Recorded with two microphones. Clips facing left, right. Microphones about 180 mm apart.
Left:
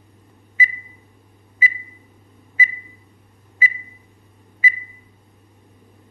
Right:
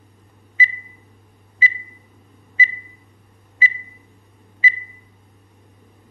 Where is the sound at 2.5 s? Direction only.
30° right (ahead or behind).